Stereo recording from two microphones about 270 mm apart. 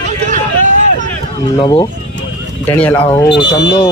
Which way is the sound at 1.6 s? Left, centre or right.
Centre.